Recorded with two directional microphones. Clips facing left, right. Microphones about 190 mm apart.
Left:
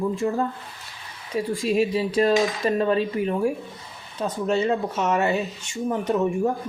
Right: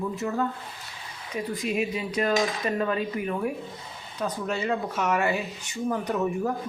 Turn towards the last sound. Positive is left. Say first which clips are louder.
# left 5 dB
turn(degrees=25)  # may be behind; listen again after turning